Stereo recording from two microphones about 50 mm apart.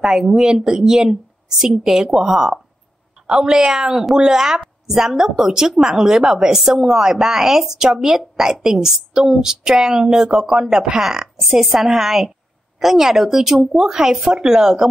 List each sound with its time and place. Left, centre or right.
0.0 s a woman's voice: centre